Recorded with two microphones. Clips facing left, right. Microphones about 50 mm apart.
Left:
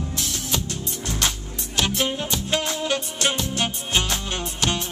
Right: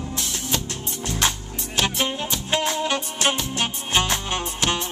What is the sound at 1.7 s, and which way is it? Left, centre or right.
Music, centre.